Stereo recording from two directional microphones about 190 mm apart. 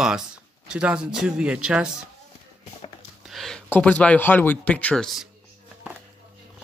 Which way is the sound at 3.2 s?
Centre (ahead or behind).